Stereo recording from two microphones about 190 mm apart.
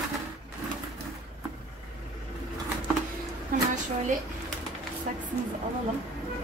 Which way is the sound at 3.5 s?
50° right (ahead or behind).